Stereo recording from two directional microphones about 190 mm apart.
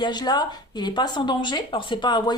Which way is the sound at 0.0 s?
20° left (ahead or behind).